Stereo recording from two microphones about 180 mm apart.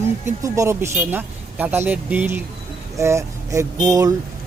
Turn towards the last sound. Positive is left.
turn(degrees=-20)  # may be behind; listen again after turning